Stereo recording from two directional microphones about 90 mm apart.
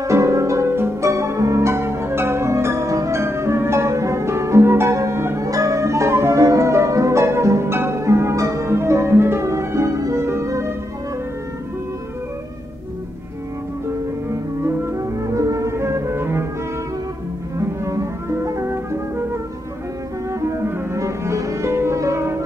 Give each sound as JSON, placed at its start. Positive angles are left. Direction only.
{"t": 0.0, "sound": "music", "side_deg": -35}
{"t": 14.3, "sound": "music", "side_deg": -30}
{"t": 17.6, "sound": "music", "side_deg": -35}